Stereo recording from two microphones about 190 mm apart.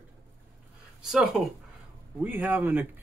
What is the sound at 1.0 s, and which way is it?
Speech, 5° right (ahead or behind).